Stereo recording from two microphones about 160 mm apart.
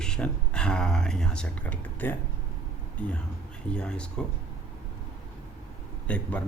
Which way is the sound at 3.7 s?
5° left (ahead or behind).